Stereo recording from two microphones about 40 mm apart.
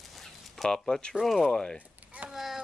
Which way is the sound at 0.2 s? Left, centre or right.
Centre.